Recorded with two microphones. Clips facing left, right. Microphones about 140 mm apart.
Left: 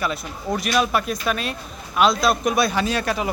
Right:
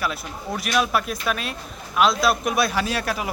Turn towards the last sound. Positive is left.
turn(degrees=0)  # may be behind; listen again after turning